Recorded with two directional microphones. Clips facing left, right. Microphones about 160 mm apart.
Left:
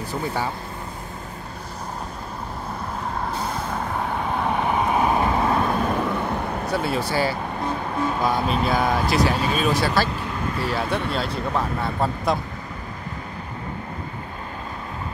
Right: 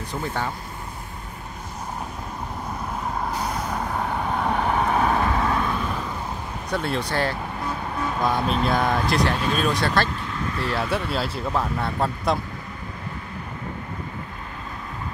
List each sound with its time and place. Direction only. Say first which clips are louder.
0.1 s speech: left 1 dB; 10° left (ahead or behind)
3.3 s vehicle: even; centre (ahead or behind); by 5.6 s 25° left (ahead or behind)
5.6 s vehicle: left 4 dB; 40° left (ahead or behind)
5.9 s vehicle: left 7 dB; 65° left (ahead or behind)
6.7 s speech: even; 5° left (ahead or behind)